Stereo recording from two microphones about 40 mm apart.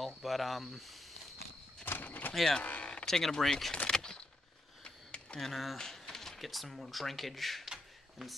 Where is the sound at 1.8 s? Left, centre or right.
Left.